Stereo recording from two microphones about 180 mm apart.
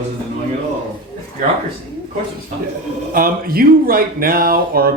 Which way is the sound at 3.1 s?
55° right (ahead or behind).